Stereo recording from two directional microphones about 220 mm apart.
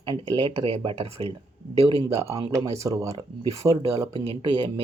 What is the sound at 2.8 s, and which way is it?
Speech, 15° right (ahead or behind).